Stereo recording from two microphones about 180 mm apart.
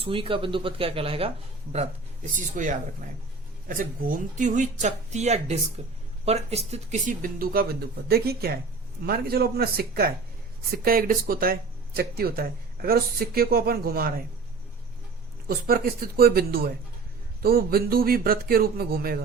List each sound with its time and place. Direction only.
0.0 s speech: 30° right (ahead or behind)
2.6 s speech: 50° right (ahead or behind)
15.4 s speech: 55° right (ahead or behind)